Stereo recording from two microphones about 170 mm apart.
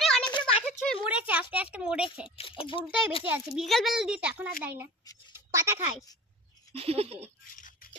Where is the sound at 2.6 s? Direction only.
30° left (ahead or behind).